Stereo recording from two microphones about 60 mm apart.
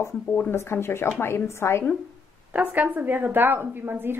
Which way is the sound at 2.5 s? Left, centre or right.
Right.